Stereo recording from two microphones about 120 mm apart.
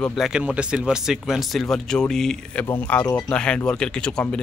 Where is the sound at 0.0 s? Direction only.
Centre (ahead or behind).